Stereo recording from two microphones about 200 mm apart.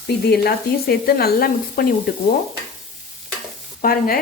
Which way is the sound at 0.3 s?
50° left (ahead or behind).